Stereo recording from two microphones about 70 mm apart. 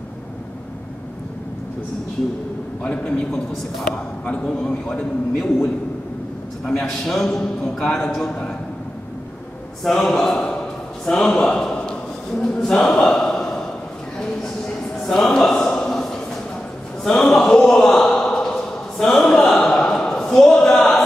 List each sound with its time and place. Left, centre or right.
2.8 s a man's voice: centre
9.8 s a man's voice: centre
14.1 s a sound: centre